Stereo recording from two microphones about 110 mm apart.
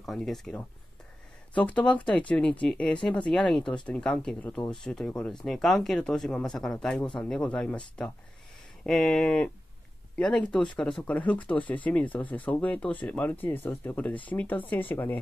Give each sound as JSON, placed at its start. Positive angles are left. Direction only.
{"t": 0.0, "sound": "speech", "side_deg": 0}